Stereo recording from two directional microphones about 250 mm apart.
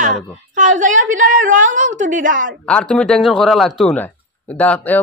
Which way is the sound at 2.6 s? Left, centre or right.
Centre.